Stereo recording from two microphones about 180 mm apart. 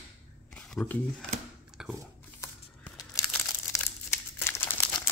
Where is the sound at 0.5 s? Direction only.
5° left (ahead or behind).